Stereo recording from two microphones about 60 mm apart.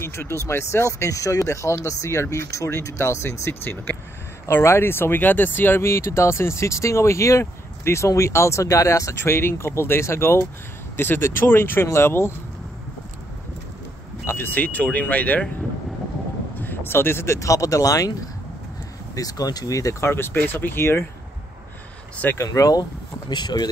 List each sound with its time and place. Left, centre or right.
0.0 s speech: left
1.5 s speech: left
3.6 s speech: left
5.9 s speech: left
14.2 s speech: left
16.5 s a sound: left
17.4 s speech: left
19.1 s speech: left
20.0 s speech: left
22.4 s speech: left